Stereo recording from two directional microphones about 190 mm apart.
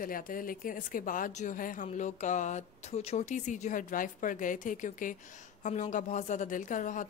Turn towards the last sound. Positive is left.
turn(degrees=40)  # may be behind; listen again after turning